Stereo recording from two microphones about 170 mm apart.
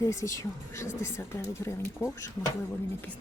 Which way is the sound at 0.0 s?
15° left (ahead or behind).